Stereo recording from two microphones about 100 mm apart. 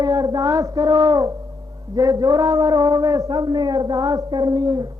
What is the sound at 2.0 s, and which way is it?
Speech, 40° right (ahead or behind).